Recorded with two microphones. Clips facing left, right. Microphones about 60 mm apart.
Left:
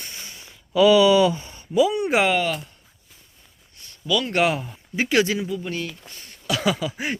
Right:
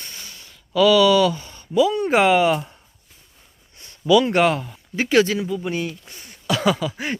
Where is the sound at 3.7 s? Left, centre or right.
Right.